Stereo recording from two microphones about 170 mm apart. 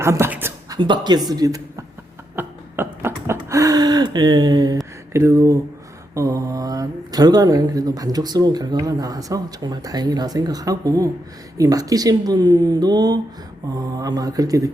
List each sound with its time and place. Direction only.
0.0 s a sound: 15° right (ahead or behind)
0.8 s speech: 25° right (ahead or behind)
2.3 s beatboxing: 10° right (ahead or behind)
3.5 s gasp: 20° right (ahead or behind)
5.1 s a sound: 15° right (ahead or behind)
6.1 s speech: 20° right (ahead or behind)